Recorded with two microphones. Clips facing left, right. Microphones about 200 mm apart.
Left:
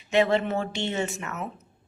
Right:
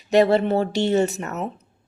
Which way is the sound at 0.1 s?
40° right (ahead or behind).